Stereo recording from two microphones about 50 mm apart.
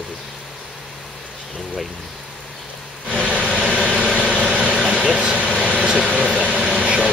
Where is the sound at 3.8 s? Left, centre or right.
Centre.